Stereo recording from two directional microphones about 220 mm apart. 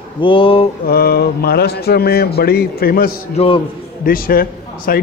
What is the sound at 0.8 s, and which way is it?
Speech, 45° left (ahead or behind).